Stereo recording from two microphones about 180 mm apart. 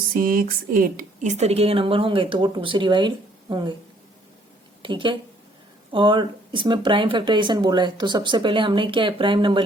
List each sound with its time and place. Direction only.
0.1 s a woman's voice: 50° right (ahead or behind); by 3.8 s 25° right (ahead or behind)
4.8 s a woman's voice: 25° right (ahead or behind)